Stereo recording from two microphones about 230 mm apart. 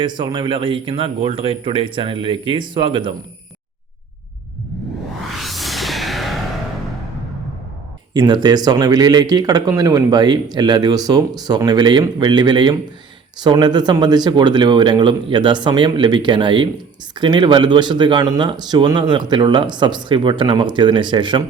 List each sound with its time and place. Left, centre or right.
0.0 s speech: centre
5.3 s music: centre
8.1 s speech: centre